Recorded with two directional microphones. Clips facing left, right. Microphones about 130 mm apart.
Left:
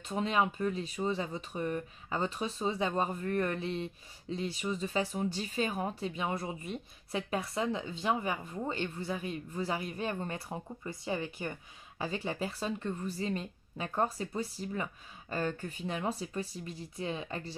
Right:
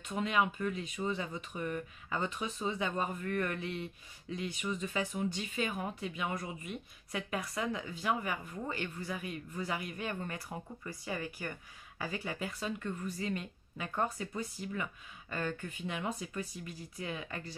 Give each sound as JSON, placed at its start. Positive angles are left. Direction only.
{"t": 0.0, "sound": "a woman's voice", "side_deg": 30}